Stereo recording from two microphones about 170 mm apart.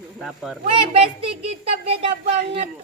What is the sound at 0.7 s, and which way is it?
Speech, 35° right (ahead or behind).